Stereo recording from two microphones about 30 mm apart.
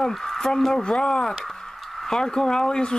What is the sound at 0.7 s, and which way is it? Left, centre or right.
Speech, left.